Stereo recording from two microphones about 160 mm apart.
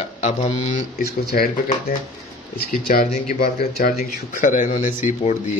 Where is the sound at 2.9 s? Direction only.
60° left (ahead or behind).